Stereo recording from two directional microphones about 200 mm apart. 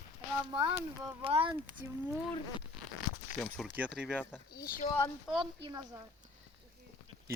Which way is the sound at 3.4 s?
10° left (ahead or behind).